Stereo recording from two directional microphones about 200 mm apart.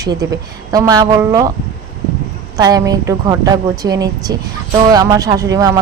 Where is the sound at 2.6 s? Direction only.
20° right (ahead or behind).